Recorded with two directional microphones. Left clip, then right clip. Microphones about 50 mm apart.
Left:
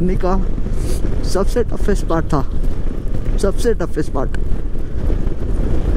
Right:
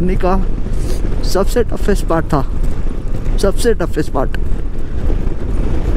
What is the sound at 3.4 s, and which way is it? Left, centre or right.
Speech, left.